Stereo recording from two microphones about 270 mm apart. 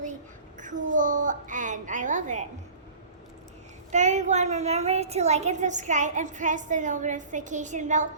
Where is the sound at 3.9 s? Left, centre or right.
Right.